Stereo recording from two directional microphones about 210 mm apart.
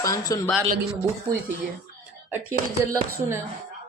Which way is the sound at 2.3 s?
10° right (ahead or behind).